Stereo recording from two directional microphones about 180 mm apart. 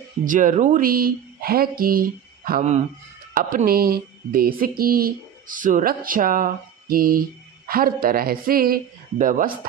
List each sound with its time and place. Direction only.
0.2 s speech: 45° right (ahead or behind)